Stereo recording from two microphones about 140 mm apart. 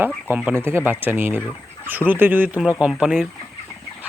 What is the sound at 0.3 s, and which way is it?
Speech, 15° right (ahead or behind).